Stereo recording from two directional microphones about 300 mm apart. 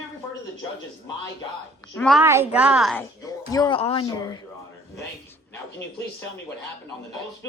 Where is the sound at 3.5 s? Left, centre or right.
Centre.